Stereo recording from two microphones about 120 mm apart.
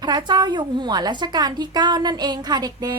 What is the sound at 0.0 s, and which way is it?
A woman's voice, 35° right (ahead or behind).